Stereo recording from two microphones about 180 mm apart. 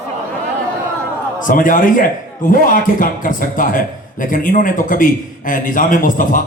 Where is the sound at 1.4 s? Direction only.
45° left (ahead or behind).